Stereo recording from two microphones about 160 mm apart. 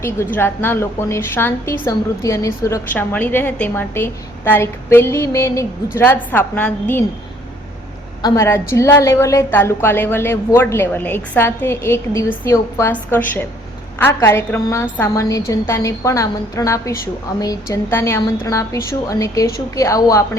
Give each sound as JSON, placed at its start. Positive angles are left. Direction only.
{"t": 0.3, "sound": "a woman's voice", "side_deg": 15}
{"t": 8.2, "sound": "a woman's voice", "side_deg": 20}